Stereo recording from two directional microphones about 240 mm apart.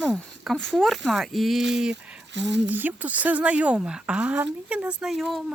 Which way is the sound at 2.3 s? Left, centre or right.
Right.